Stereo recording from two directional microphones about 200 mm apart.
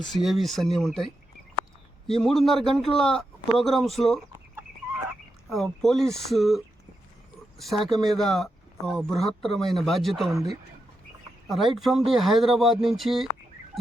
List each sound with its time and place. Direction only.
0.0 s a man's voice: centre (ahead or behind)
5.5 s a man's voice: centre (ahead or behind)
7.9 s a man's voice: centre (ahead or behind)
10.3 s speech: 20° right (ahead or behind)
11.4 s a man's voice: centre (ahead or behind)